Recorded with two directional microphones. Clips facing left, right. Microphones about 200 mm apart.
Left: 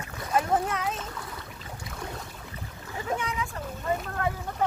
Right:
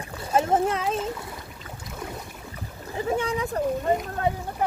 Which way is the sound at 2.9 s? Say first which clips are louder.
Right 6 dB; 30° right (ahead or behind).